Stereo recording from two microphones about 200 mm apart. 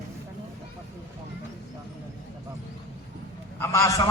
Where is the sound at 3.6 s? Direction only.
15° left (ahead or behind).